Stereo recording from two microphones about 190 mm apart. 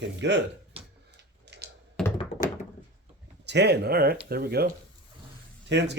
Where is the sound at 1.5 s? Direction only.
65° right (ahead or behind).